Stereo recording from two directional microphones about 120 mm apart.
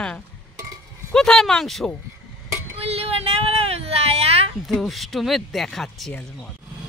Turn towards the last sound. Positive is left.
turn(degrees=5)  # may be behind; listen again after turning